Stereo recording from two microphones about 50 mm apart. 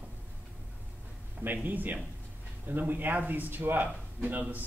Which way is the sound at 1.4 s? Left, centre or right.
Right.